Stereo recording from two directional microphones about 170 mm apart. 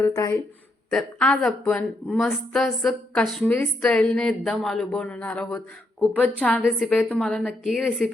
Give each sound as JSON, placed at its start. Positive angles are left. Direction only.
{"t": 0.0, "sound": "speech", "side_deg": 20}
{"t": 0.9, "sound": "a woman's voice", "side_deg": 5}